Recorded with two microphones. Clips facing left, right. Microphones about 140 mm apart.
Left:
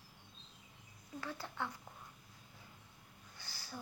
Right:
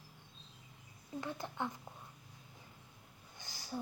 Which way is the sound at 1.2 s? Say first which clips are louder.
Right 2 dB; 20° right (ahead or behind).